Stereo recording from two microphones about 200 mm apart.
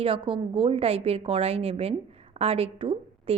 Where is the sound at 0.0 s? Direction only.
25° right (ahead or behind).